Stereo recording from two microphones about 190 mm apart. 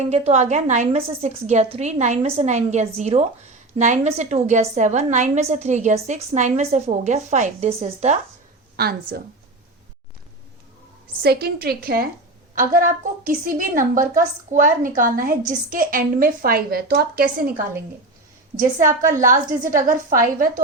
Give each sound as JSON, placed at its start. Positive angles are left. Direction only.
{"t": 0.1, "sound": "a woman's voice", "side_deg": -35}
{"t": 8.7, "sound": "a sound", "side_deg": -55}
{"t": 11.2, "sound": "a woman's voice", "side_deg": -55}